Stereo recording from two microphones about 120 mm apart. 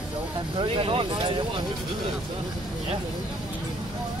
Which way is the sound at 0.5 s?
45° right (ahead or behind).